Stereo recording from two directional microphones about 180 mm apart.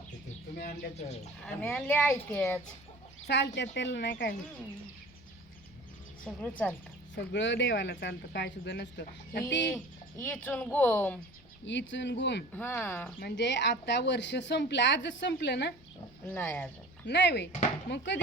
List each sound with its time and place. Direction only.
0.5 s speech: 55° left (ahead or behind)
0.9 s speech: 35° left (ahead or behind)
1.5 s a woman's voice: 5° left (ahead or behind)
3.2 s a woman's voice: 70° left (ahead or behind)
6.2 s a woman's voice: 5° left (ahead or behind)
7.2 s a woman's voice: 90° left; by 9.6 s 70° left (ahead or behind)
9.6 s speech: 10° left (ahead or behind)
11.6 s a woman's voice: 85° left
12.5 s speech: 10° left (ahead or behind)
13.1 s a woman's voice: 65° left (ahead or behind)
16.3 s speech: 10° left (ahead or behind)
17.1 s a woman's voice: 70° left (ahead or behind)